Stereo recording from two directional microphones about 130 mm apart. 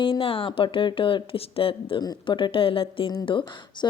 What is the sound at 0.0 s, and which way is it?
A woman's voice, 45° left (ahead or behind).